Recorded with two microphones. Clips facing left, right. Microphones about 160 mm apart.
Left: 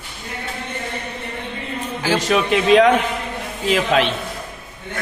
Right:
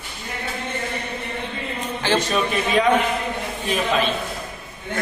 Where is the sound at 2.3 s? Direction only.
90° left.